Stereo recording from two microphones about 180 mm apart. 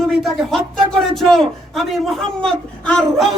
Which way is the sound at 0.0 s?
Centre (ahead or behind).